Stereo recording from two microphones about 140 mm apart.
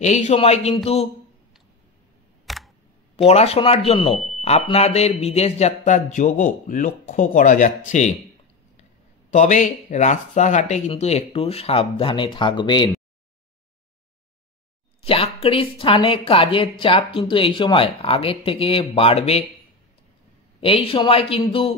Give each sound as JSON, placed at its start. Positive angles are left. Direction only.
{"t": 0.0, "sound": "speech", "side_deg": 55}
{"t": 2.4, "sound": "camera", "side_deg": 0}
{"t": 3.3, "sound": "speech", "side_deg": 50}
{"t": 4.1, "sound": "speech", "side_deg": 0}
{"t": 4.4, "sound": "a sound", "side_deg": 50}
{"t": 4.6, "sound": "a man's voice", "side_deg": 45}
{"t": 9.3, "sound": "a man's voice", "side_deg": 60}
{"t": 15.0, "sound": "speech", "side_deg": 45}
{"t": 20.6, "sound": "speech", "side_deg": 40}